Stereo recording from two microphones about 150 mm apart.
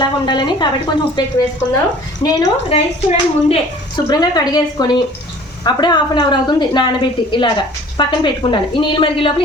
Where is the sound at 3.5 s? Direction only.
30° left (ahead or behind).